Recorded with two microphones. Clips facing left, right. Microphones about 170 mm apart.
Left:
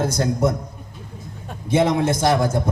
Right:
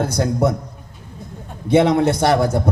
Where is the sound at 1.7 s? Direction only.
65° right (ahead or behind).